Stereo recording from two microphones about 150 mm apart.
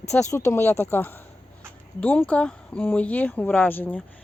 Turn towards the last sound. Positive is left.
turn(degrees=10)  # may be behind; listen again after turning